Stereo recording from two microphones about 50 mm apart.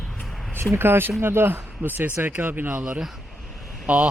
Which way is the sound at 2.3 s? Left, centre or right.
Right.